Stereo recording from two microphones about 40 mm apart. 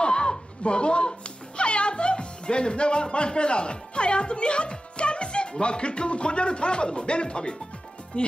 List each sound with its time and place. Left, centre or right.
0.0 s speech: left